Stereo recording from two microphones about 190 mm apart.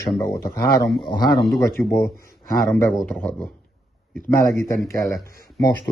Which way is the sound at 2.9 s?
5° left (ahead or behind).